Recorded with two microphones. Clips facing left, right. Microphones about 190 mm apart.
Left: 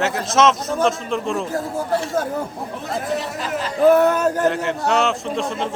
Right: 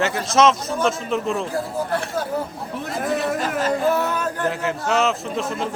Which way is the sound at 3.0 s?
50° right (ahead or behind).